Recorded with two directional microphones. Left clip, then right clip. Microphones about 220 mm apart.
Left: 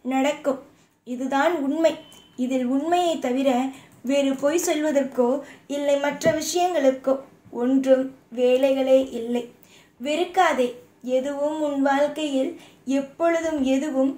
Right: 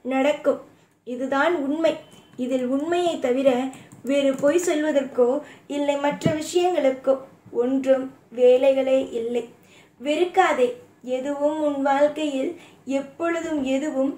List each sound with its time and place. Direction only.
0.1 s a woman's voice: 25° left (ahead or behind)
5.7 s a woman's voice: 30° left (ahead or behind)